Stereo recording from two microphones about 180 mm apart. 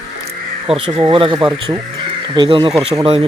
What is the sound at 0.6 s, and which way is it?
Speech, 30° right (ahead or behind).